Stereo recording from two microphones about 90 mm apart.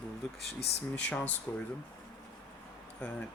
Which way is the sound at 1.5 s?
30° left (ahead or behind).